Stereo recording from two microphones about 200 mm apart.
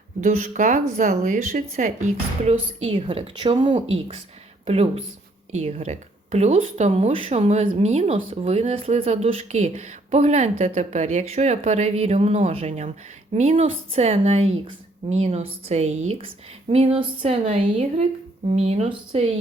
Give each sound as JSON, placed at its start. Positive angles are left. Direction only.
{"t": 0.2, "sound": "speech", "side_deg": -40}